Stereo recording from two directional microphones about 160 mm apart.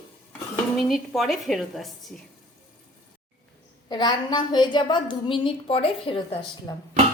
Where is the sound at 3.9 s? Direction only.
25° left (ahead or behind).